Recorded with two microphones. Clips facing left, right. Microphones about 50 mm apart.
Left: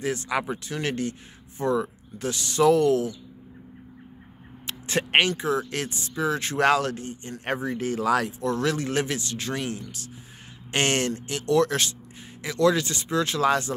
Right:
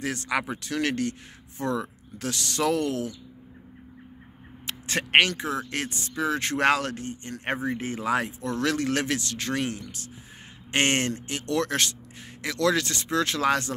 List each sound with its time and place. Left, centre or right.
0.0 s speech: right
4.6 s speech: right
5.5 s speech: right
8.5 s speech: right
10.7 s speech: right
12.4 s speech: right